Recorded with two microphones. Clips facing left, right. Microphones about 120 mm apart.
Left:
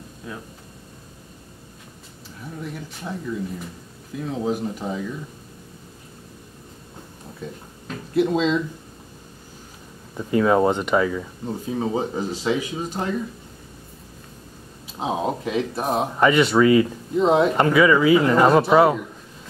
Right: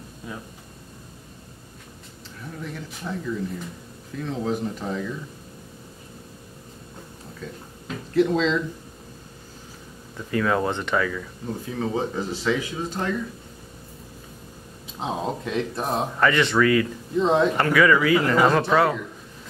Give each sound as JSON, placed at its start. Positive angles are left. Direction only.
{"t": 2.6, "sound": "speech", "side_deg": 10}
{"t": 8.1, "sound": "speech", "side_deg": 15}
{"t": 10.1, "sound": "speech", "side_deg": 20}
{"t": 15.0, "sound": "speech", "side_deg": 10}
{"t": 17.2, "sound": "speech", "side_deg": 10}